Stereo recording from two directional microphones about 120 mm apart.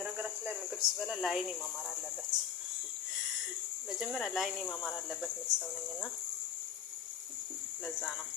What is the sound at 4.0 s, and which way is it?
Speech, centre (ahead or behind).